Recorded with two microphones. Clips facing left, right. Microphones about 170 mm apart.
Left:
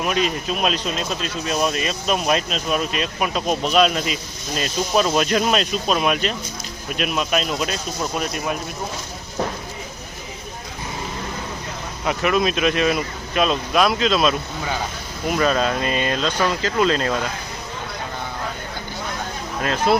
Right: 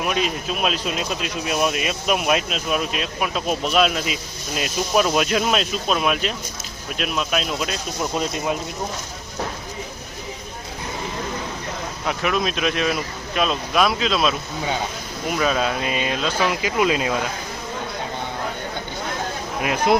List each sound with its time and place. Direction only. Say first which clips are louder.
0.0 s speech: left 1 dB; 5° right (ahead or behind)
8.0 s speech: right 2 dB; 20° right (ahead or behind)
12.0 s speech: left 3 dB; centre (ahead or behind)
19.6 s speech: even; 15° right (ahead or behind)